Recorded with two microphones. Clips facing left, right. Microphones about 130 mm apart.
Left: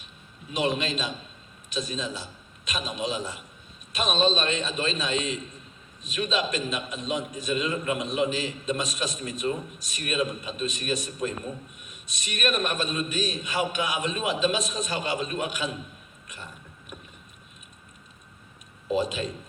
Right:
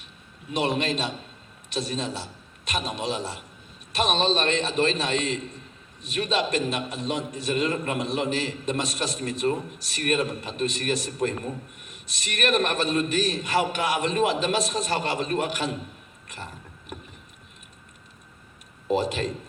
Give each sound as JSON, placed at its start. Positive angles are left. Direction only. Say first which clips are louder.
{"t": 0.7, "sound": "a man's voice", "louder": "right 3 dB", "side_deg": -65}
{"t": 18.9, "sound": "a man's voice", "louder": "right 2 dB", "side_deg": -75}